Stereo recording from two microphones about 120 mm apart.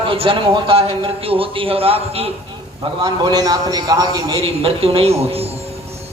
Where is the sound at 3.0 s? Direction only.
35° right (ahead or behind).